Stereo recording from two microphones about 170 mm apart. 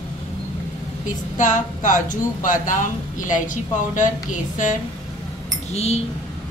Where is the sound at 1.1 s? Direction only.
50° left (ahead or behind).